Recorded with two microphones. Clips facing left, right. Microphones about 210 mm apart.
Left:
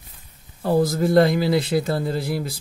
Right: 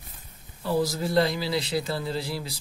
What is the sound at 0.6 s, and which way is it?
A man's voice, 55° left (ahead or behind).